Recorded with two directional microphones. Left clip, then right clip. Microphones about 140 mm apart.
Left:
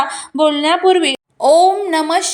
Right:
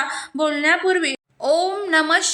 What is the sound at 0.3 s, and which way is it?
A woman's voice, 20° left (ahead or behind).